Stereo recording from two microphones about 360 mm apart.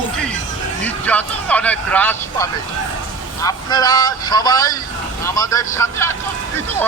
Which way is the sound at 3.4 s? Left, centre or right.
Centre.